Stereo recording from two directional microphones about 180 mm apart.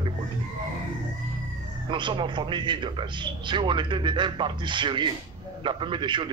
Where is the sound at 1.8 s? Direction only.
25° right (ahead or behind).